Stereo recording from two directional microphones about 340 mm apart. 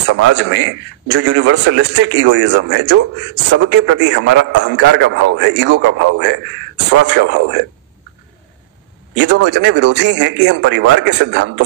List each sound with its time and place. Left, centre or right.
0.0 s a man's voice: right
9.1 s a man's voice: right